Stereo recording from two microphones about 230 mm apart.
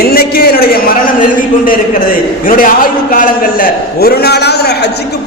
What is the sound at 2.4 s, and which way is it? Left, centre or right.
A man's voice, left.